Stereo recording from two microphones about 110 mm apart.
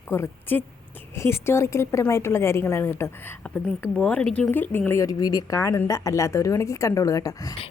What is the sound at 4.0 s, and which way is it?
A woman's voice, 5° left (ahead or behind).